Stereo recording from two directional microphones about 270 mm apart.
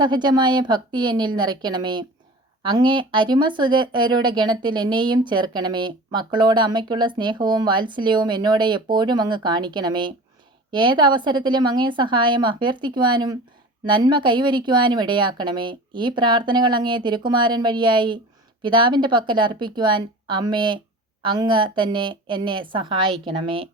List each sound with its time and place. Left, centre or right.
0.0 s speech: centre